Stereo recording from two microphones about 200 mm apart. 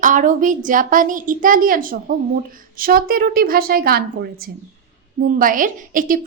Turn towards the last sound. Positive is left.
turn(degrees=-40)  # may be behind; listen again after turning